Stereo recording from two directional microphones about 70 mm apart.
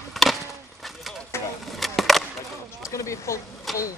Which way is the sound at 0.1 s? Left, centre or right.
Centre.